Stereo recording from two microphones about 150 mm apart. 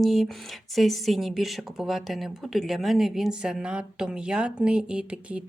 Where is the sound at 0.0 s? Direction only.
Centre (ahead or behind).